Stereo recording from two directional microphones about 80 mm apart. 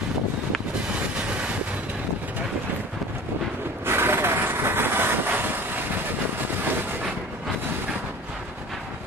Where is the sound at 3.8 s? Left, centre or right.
Right.